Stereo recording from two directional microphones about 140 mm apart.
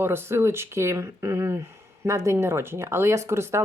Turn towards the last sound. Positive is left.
turn(degrees=-20)  # may be behind; listen again after turning